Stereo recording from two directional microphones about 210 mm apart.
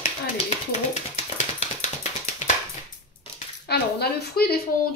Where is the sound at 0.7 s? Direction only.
35° left (ahead or behind).